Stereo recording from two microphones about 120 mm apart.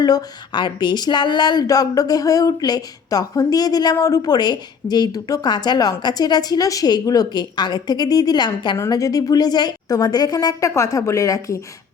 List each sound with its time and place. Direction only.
0.0 s a woman's voice: 35° left (ahead or behind)